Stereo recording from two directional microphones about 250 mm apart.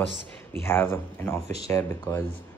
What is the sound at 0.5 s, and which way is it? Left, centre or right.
Speech, centre.